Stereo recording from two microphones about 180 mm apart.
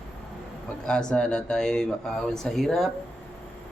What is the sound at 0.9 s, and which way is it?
Speech, 5° left (ahead or behind).